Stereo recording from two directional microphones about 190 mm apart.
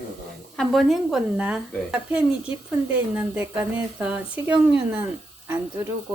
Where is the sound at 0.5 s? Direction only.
Centre (ahead or behind).